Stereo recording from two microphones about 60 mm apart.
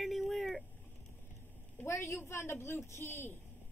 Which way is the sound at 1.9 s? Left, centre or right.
Left.